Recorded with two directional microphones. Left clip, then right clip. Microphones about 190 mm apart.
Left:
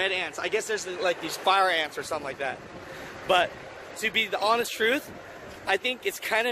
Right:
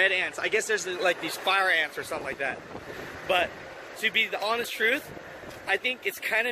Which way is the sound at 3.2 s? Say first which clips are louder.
Left 3 dB; 30° left (ahead or behind).